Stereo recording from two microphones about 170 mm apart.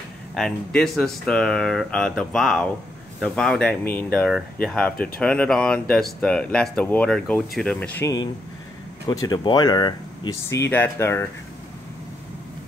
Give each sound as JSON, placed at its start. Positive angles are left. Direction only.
{"t": 0.3, "sound": "speech", "side_deg": 5}
{"t": 8.0, "sound": "speech", "side_deg": 20}
{"t": 10.6, "sound": "speech", "side_deg": 15}